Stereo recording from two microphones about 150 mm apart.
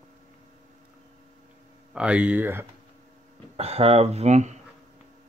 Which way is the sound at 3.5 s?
40° right (ahead or behind).